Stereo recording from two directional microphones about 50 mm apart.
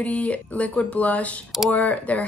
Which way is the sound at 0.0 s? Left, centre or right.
Left.